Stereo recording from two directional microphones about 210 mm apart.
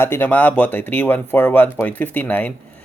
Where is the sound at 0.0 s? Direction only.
10° left (ahead or behind).